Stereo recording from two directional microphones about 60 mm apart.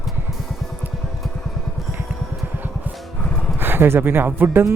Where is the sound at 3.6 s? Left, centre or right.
Right.